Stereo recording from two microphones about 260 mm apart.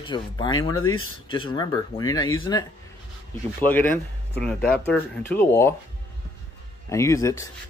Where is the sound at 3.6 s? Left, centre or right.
Centre.